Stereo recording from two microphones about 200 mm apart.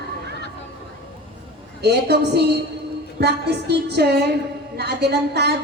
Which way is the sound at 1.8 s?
55° right (ahead or behind).